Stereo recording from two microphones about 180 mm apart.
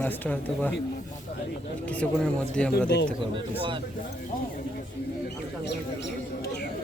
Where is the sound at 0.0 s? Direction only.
10° left (ahead or behind).